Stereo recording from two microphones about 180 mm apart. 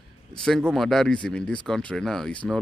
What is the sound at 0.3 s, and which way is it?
Speech, centre (ahead or behind).